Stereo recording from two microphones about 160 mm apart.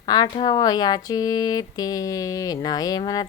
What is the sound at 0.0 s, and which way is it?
Speech, 30° left (ahead or behind).